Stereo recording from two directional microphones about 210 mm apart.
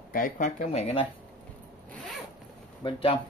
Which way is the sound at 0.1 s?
40° left (ahead or behind).